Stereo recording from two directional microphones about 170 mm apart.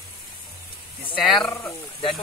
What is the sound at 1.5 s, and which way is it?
Speech, 15° left (ahead or behind).